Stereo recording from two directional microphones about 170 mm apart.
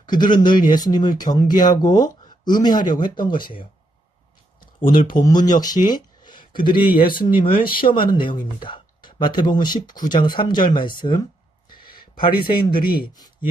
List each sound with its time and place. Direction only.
0.0 s speech: 25° left (ahead or behind)
5.2 s speech: 25° left (ahead or behind)